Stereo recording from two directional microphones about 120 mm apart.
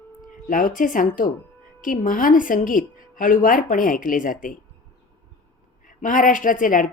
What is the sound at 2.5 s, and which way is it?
A woman's voice, 90° left.